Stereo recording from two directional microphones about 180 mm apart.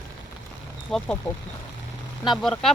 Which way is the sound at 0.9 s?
Centre (ahead or behind).